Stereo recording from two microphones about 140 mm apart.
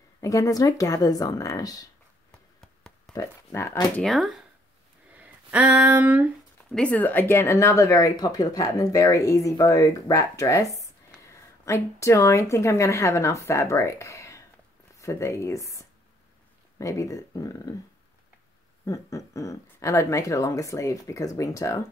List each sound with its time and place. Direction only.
0.2 s speech: 25° left (ahead or behind)
3.1 s speech: 20° left (ahead or behind)
4.0 s speech: centre (ahead or behind)
6.7 s speech: 10° left (ahead or behind)
10.7 s a sound: 20° right (ahead or behind)
11.6 s speech: 20° left (ahead or behind)
18.9 s speech: 25° left (ahead or behind)